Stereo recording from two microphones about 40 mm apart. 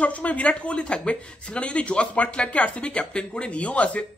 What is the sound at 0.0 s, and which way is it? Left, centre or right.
Speech, left.